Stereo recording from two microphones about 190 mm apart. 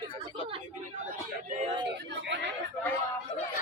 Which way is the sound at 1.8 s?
65° right (ahead or behind).